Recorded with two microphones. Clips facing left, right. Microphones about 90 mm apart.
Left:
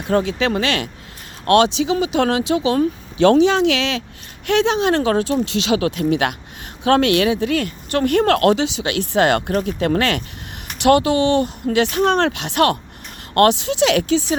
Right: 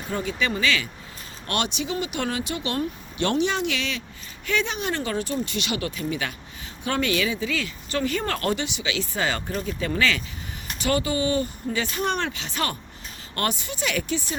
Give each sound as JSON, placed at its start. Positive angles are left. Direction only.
{"t": 0.1, "sound": "speech", "side_deg": 90}
{"t": 1.5, "sound": "speech", "side_deg": 90}
{"t": 10.8, "sound": "speech", "side_deg": 75}
{"t": 13.3, "sound": "speech", "side_deg": 90}